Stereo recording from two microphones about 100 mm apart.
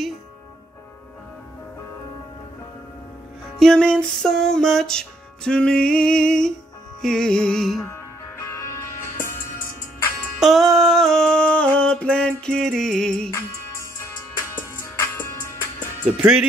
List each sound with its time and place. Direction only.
3.5 s music: 5° left (ahead or behind)
7.0 s a sound: 5° left (ahead or behind)
8.5 s music: 30° left (ahead or behind)
10.4 s a sound: centre (ahead or behind)
13.3 s music: 30° left (ahead or behind)
16.2 s speech: 10° right (ahead or behind)